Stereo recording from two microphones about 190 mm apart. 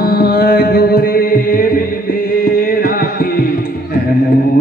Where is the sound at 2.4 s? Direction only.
50° left (ahead or behind).